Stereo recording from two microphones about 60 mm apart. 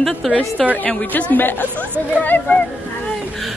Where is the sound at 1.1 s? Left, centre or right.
Left.